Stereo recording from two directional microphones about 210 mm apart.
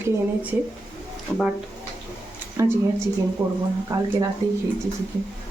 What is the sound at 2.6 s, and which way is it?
A woman's voice, 15° right (ahead or behind).